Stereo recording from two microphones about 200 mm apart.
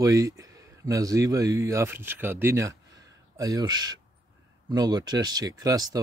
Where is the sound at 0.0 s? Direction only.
15° right (ahead or behind).